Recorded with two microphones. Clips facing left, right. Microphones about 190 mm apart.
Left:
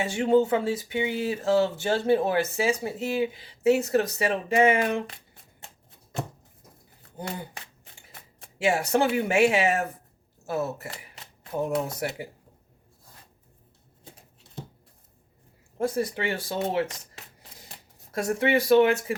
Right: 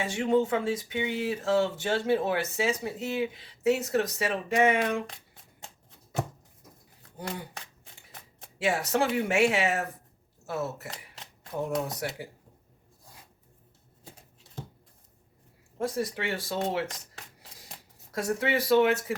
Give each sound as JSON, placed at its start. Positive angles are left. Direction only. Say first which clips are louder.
{"t": 0.0, "sound": "speech", "louder": "left 4 dB", "side_deg": 30}
{"t": 8.5, "sound": "speech", "louder": "left 3 dB", "side_deg": 25}
{"t": 11.9, "sound": "speech", "louder": "left 3 dB", "side_deg": 25}
{"t": 15.8, "sound": "speech", "louder": "left 4 dB", "side_deg": 25}
{"t": 18.1, "sound": "speech", "louder": "left 4 dB", "side_deg": 25}